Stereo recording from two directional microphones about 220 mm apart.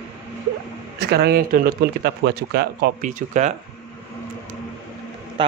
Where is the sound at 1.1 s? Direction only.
45° right (ahead or behind).